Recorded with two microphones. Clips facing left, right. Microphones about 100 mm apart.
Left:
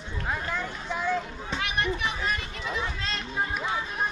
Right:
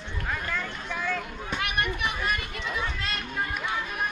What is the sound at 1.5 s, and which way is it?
Speech, 55° right (ahead or behind).